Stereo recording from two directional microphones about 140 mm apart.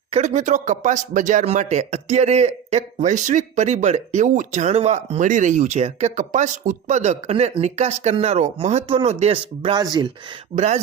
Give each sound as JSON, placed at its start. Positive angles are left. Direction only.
{"t": 0.1, "sound": "a man's voice", "side_deg": -55}
{"t": 9.3, "sound": "speech", "side_deg": -40}
{"t": 10.5, "sound": "speech", "side_deg": -55}